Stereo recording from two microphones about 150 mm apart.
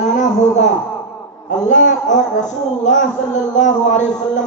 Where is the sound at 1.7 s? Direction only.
55° left (ahead or behind).